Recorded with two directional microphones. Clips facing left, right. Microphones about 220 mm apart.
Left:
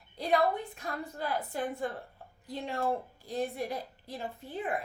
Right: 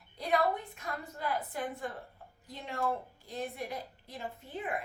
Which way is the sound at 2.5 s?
35° left (ahead or behind).